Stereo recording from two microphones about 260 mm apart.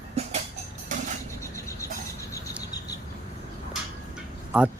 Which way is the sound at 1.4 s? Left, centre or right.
Centre.